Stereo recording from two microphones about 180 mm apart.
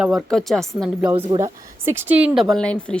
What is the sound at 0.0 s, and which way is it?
Speech, centre (ahead or behind).